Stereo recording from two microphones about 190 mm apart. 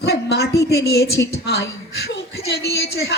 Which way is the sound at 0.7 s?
60° left (ahead or behind).